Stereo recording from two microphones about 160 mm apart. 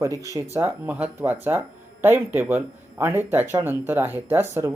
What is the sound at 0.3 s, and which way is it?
Speech, 15° right (ahead or behind).